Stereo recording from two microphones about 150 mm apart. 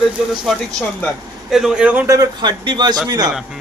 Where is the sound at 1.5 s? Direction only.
Centre (ahead or behind).